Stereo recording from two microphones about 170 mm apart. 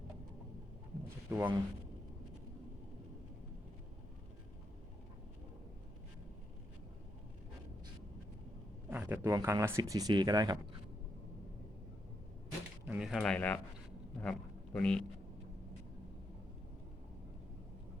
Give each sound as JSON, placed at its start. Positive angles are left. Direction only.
{"t": 1.3, "sound": "speech", "side_deg": -10}
{"t": 8.9, "sound": "speech", "side_deg": -10}
{"t": 12.8, "sound": "a man's voice", "side_deg": -5}